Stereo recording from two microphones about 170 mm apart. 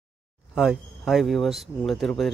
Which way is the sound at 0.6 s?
Centre (ahead or behind).